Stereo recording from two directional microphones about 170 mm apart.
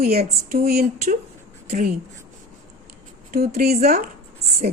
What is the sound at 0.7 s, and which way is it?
Speech, 65° right (ahead or behind).